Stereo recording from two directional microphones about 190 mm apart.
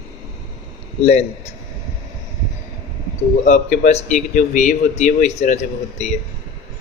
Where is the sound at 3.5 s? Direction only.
40° left (ahead or behind).